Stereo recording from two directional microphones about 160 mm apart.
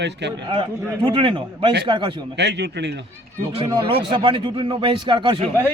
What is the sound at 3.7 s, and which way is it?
Speech, 30° right (ahead or behind).